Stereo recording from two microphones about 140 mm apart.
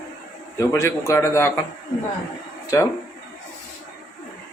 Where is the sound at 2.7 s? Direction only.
20° left (ahead or behind).